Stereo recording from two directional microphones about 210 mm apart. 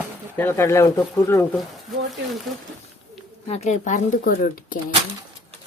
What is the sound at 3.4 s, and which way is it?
Speech, 30° left (ahead or behind).